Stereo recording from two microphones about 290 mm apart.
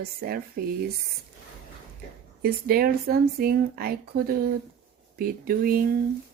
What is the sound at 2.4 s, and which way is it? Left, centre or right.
Speech, right.